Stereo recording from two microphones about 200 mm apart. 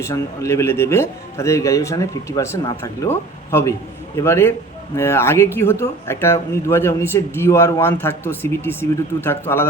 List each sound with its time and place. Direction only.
0.0 s speech: 15° left (ahead or behind)